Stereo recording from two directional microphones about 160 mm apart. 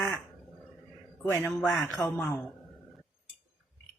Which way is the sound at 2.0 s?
15° left (ahead or behind).